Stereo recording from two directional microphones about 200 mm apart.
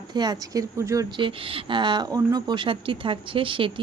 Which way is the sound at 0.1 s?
20° right (ahead or behind).